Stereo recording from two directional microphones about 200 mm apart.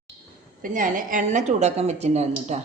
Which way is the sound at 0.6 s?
40° right (ahead or behind).